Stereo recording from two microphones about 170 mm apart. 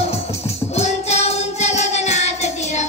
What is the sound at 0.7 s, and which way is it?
Music, 40° left (ahead or behind).